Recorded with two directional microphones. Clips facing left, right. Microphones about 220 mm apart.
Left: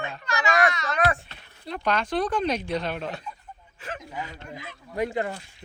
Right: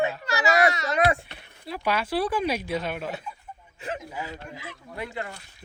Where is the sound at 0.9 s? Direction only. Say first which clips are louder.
Right 2 dB; 25° right (ahead or behind).